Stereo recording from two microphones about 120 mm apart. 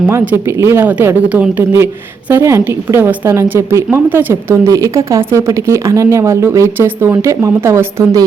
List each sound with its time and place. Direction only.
0.0 s speech: 20° right (ahead or behind)